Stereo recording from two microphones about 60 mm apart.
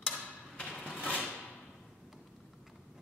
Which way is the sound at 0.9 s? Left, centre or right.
Left.